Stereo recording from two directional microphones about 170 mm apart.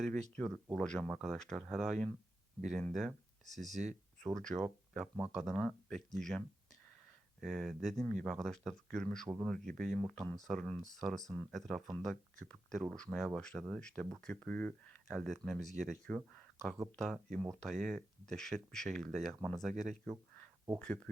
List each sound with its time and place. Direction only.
0.8 s speech: 5° left (ahead or behind)
7.4 s speech: centre (ahead or behind)